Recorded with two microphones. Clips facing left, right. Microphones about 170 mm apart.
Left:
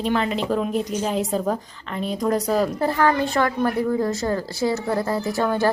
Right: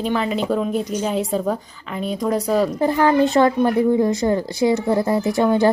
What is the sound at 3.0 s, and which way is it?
A woman's voice, 25° right (ahead or behind).